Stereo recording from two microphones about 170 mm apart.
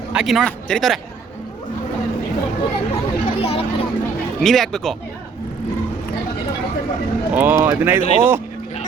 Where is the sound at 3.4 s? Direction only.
35° left (ahead or behind).